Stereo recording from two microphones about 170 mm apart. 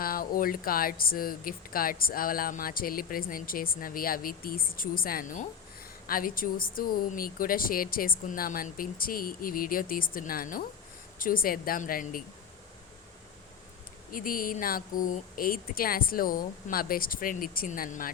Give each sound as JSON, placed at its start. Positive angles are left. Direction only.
{"t": 0.0, "sound": "speech", "side_deg": 60}
{"t": 14.1, "sound": "speech", "side_deg": 55}